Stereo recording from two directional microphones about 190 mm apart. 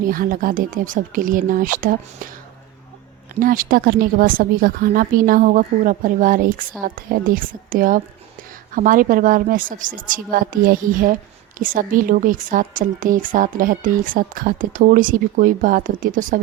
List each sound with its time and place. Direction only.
0.0 s a woman's voice: 50° right (ahead or behind)
3.4 s a woman's voice: 50° right (ahead or behind)